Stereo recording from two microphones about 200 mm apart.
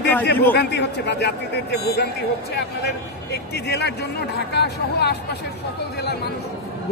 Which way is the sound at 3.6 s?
55° left (ahead or behind).